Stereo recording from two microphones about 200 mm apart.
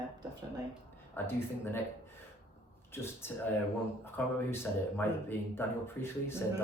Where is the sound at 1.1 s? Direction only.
10° left (ahead or behind).